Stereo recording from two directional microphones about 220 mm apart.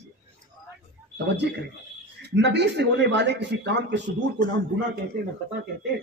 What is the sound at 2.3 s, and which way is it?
A man's voice, 50° right (ahead or behind).